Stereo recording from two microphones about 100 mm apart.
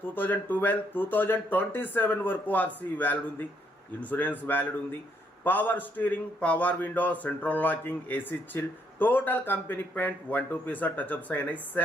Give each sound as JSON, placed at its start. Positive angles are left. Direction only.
{"t": 0.1, "sound": "a man's voice", "side_deg": 20}